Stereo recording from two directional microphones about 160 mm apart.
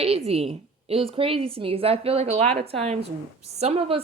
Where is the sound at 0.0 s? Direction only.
40° right (ahead or behind).